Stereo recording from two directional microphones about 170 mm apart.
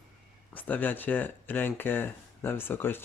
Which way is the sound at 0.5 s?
10° left (ahead or behind).